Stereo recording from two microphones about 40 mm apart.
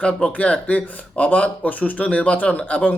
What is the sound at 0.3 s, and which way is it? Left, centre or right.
Speech, left.